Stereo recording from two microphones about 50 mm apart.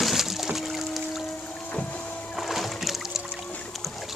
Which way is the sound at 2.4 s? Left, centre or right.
Centre.